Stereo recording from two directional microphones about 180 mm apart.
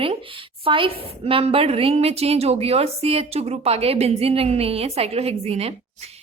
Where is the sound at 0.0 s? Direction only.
30° right (ahead or behind).